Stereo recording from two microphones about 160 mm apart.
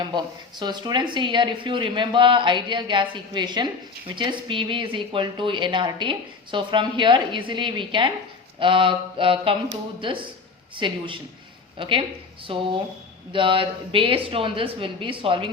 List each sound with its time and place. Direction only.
0.0 s speech: 25° right (ahead or behind)